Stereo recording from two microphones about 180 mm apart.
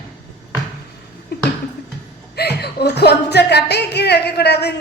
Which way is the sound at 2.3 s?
65° left (ahead or behind).